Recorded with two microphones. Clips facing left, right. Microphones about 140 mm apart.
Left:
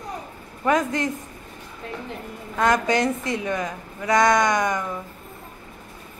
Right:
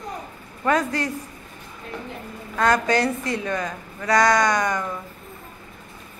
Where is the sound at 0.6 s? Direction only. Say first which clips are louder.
Left 1 dB; 20° left (ahead or behind).